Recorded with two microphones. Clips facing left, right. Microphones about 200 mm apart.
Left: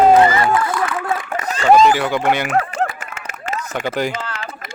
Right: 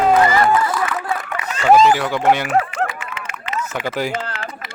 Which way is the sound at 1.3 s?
45° left (ahead or behind).